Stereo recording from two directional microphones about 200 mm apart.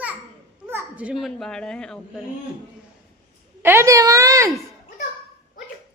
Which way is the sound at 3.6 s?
10° right (ahead or behind).